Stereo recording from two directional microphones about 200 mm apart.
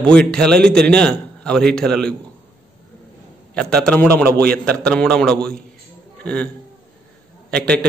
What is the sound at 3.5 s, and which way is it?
Speech, 5° left (ahead or behind).